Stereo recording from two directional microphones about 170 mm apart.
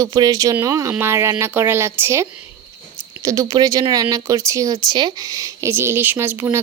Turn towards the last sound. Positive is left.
turn(degrees=-15)  # may be behind; listen again after turning